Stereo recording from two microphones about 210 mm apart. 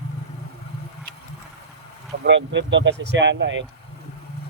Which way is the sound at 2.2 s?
60° right (ahead or behind).